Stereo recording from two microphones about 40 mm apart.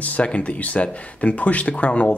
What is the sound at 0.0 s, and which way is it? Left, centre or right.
Speech, left.